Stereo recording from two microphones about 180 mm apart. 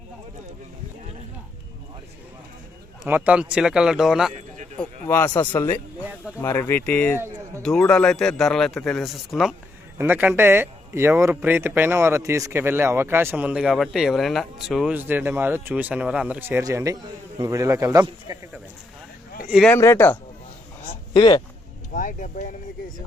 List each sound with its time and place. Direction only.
3.1 s a man's voice: 10° right (ahead or behind)
4.4 s a sound: 40° right (ahead or behind)
4.8 s a man's voice: 10° left (ahead or behind); by 18.3 s 20° right (ahead or behind)
19.5 s speech: 5° right (ahead or behind)
19.7 s speech: 15° left (ahead or behind)
20.8 s a sound: 25° left (ahead or behind)
21.9 s speech: 50° left (ahead or behind)